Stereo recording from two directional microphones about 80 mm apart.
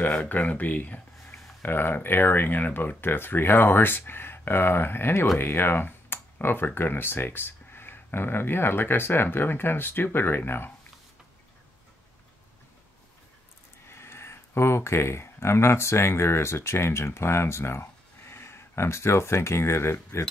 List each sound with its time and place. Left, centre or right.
0.0 s speech: left
13.8 s speech: left